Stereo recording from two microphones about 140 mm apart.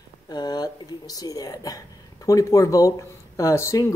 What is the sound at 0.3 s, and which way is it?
Speech, 30° left (ahead or behind).